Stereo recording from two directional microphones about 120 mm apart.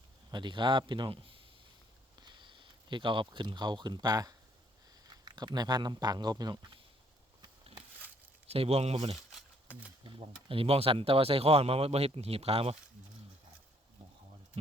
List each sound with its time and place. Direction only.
0.3 s speech: 40° right (ahead or behind)
8.4 s speech: 55° right (ahead or behind)
10.1 s speech: 50° right (ahead or behind)